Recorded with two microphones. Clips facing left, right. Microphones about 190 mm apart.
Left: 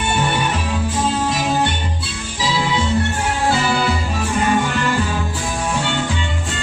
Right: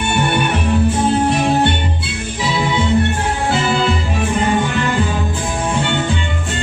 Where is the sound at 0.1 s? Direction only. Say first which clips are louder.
Right 3 dB; 65° right (ahead or behind).